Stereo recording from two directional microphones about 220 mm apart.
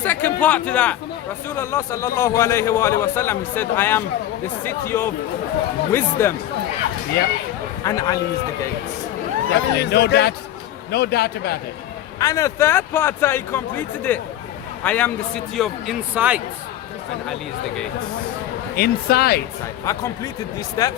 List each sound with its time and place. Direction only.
0.0 s a man's voice: 10° left (ahead or behind)
7.9 s a man's voice: 15° left (ahead or behind)
9.6 s speech: 50° left (ahead or behind)
12.2 s a man's voice: 15° left (ahead or behind); by 16.4 s 5° right (ahead or behind)
18.8 s speech: 45° left (ahead or behind)
19.8 s a man's voice: 15° left (ahead or behind)